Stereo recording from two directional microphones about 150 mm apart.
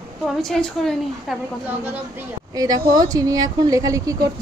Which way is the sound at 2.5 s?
25° right (ahead or behind).